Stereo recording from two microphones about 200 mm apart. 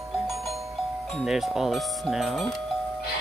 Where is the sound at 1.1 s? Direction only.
Centre (ahead or behind).